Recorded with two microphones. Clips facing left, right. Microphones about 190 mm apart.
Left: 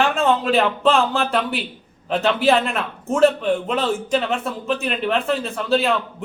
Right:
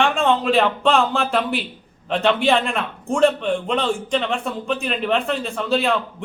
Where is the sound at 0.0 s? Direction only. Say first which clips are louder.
Even; centre (ahead or behind).